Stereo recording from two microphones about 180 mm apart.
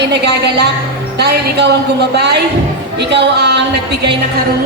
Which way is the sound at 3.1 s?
70° right (ahead or behind).